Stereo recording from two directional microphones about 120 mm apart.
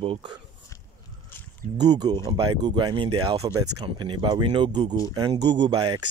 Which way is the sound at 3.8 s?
40° right (ahead or behind).